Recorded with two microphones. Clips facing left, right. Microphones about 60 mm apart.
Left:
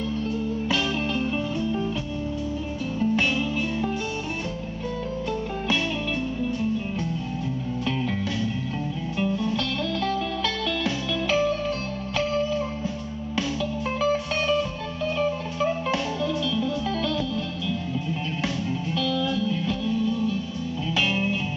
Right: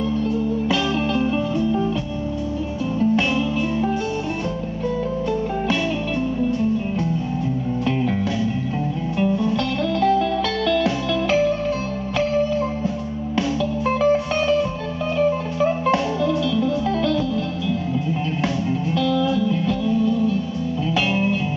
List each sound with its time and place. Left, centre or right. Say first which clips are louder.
0.7 s music: right 5 dB; centre
3.0 s music: right 4 dB; centre
9.2 s music: right 5 dB; centre
18.9 s music: right 6 dB; centre